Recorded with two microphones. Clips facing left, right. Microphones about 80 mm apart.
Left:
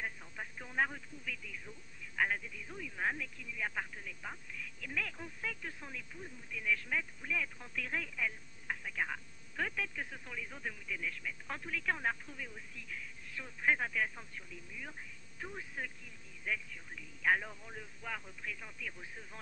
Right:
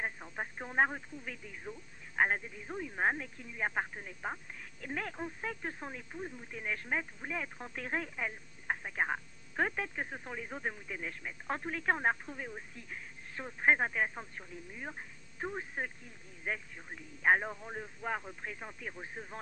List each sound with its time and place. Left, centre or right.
0.0 s speech: right